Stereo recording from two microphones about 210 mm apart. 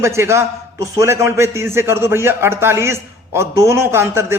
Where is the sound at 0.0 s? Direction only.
15° right (ahead or behind).